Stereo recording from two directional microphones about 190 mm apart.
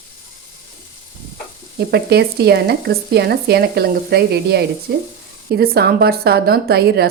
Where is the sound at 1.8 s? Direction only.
60° right (ahead or behind).